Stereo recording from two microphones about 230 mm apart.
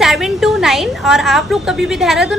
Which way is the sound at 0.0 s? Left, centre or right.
Centre.